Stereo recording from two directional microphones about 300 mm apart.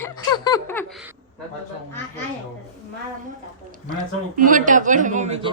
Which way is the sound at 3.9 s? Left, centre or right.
Right.